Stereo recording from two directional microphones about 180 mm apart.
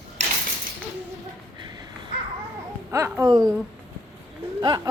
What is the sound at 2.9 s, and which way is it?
Speech, 15° right (ahead or behind).